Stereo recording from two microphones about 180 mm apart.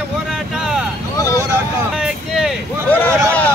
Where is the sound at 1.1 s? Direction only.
15° left (ahead or behind).